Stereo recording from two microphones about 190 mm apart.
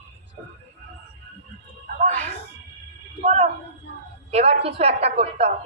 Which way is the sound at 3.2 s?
35° right (ahead or behind).